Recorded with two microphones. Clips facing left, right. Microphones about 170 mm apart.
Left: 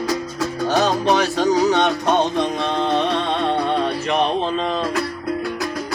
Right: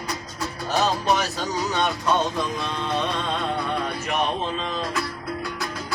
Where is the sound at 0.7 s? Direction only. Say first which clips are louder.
Left 4 dB; 80° left.